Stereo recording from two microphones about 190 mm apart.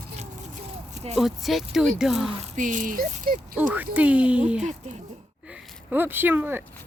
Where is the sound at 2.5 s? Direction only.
40° right (ahead or behind).